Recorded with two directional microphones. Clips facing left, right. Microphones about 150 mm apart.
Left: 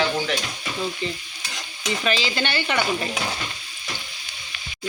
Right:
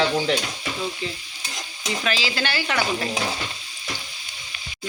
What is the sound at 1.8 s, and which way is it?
Stir, centre (ahead or behind).